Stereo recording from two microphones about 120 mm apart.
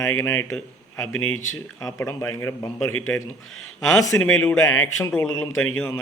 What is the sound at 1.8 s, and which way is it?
Speech, 25° left (ahead or behind).